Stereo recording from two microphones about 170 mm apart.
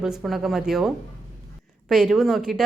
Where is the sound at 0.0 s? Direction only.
Centre (ahead or behind).